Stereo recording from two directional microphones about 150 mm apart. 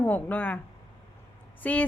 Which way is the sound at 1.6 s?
10° left (ahead or behind).